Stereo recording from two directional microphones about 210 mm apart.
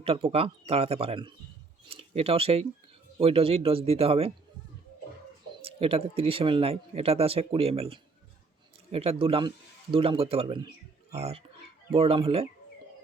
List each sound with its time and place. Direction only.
0.0 s speech: 25° right (ahead or behind)
5.6 s speech: 25° right (ahead or behind)